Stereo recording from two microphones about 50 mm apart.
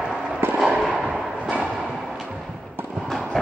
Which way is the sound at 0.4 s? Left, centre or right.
Right.